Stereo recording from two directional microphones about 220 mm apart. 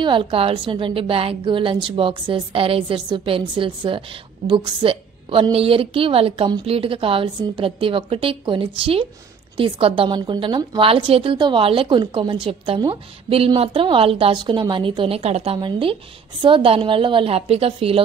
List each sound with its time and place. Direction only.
0.0 s a woman's voice: 25° right (ahead or behind)